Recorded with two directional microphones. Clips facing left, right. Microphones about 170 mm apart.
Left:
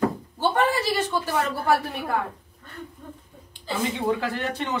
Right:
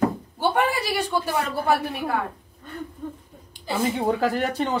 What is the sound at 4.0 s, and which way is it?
Speech, 40° right (ahead or behind).